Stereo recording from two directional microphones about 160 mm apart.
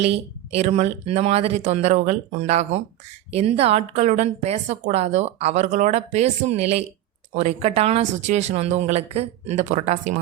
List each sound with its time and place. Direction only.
0.0 s a woman's voice: 40° right (ahead or behind)